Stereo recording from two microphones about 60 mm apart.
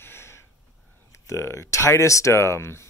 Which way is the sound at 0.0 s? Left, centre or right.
Left.